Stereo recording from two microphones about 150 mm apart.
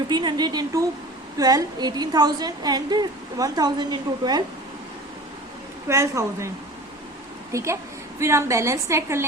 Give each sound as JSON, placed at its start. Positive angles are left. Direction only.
{"t": 0.1, "sound": "a woman's voice", "side_deg": -30}
{"t": 5.9, "sound": "a woman's voice", "side_deg": -20}
{"t": 7.5, "sound": "a woman's voice", "side_deg": -20}